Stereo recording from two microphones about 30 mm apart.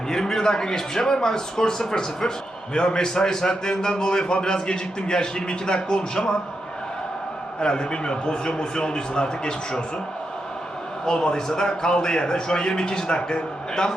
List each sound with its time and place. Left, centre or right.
0.1 s a man's voice: centre
7.6 s a man's voice: left
11.0 s a man's voice: left